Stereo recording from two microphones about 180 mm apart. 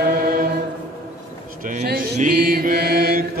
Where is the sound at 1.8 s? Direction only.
55° right (ahead or behind).